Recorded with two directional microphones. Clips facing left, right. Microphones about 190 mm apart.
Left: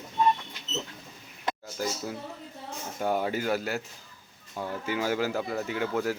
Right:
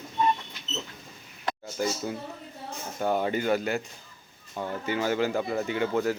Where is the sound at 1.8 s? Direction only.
Centre (ahead or behind).